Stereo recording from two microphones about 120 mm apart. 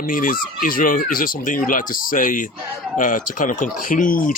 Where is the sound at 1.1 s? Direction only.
90° left.